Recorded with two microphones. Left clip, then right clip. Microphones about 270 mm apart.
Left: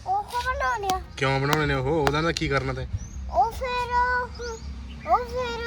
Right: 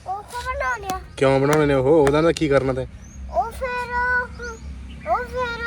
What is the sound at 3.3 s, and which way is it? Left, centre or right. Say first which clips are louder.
Child singing: even; left.